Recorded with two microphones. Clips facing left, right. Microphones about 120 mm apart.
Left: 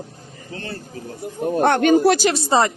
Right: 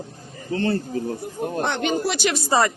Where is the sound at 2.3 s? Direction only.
30° left (ahead or behind).